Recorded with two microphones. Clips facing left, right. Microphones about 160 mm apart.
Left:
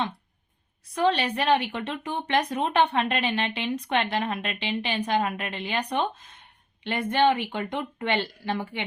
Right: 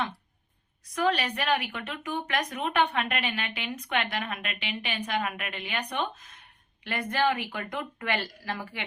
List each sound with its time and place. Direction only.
0.9 s a woman's voice: 30° left (ahead or behind)